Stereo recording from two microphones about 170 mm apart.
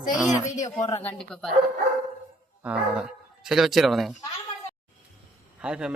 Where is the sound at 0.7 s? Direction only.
20° left (ahead or behind).